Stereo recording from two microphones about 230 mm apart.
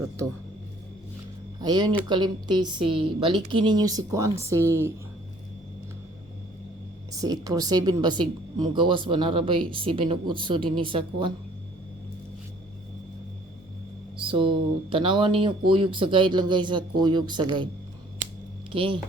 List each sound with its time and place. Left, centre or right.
1.6 s speech: centre
7.1 s speech: centre
14.2 s speech: right
18.7 s speech: right